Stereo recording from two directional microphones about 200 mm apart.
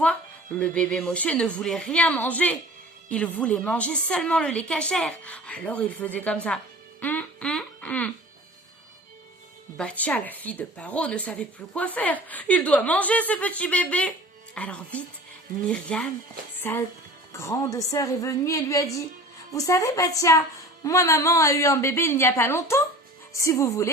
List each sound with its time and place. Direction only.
0.6 s speech: 5° left (ahead or behind)
7.0 s a sound: 10° left (ahead or behind)
9.7 s speech: 5° left (ahead or behind)
17.3 s speech: 15° left (ahead or behind)